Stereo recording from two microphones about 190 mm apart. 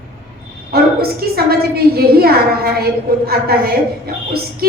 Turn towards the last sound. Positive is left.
turn(degrees=-55)  # may be behind; listen again after turning